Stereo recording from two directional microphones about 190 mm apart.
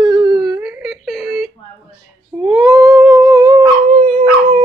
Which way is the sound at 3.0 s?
20° right (ahead or behind).